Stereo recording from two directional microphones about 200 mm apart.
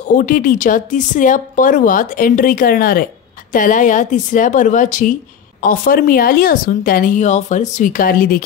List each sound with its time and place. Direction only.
0.1 s a woman's voice: 45° left (ahead or behind)